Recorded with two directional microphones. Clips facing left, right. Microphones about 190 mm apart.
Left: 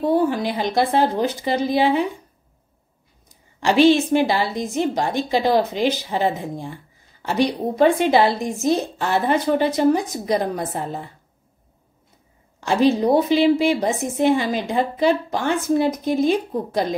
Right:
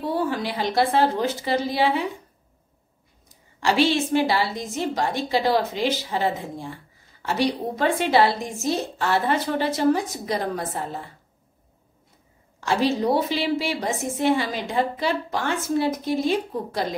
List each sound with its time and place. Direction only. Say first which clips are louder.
0.1 s a woman's voice: left 4 dB; 15° left (ahead or behind)
3.6 s a woman's voice: left 6 dB; 20° left (ahead or behind)
12.5 s a woman's voice: left 5 dB; 20° left (ahead or behind)